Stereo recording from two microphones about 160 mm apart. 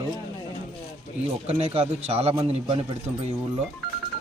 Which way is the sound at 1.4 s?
40° right (ahead or behind).